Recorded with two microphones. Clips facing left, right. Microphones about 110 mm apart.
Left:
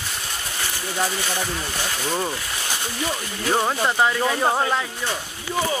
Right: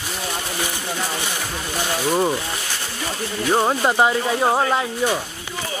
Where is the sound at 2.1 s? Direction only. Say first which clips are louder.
Right 7 dB; 20° right (ahead or behind).